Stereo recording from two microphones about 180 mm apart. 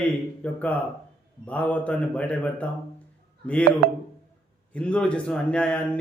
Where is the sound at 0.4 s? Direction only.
10° left (ahead or behind).